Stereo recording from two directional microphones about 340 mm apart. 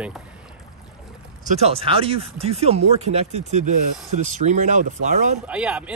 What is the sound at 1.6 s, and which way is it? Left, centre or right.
Speech, centre.